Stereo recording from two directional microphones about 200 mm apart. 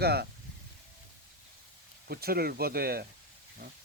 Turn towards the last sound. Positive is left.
turn(degrees=-50)  # may be behind; listen again after turning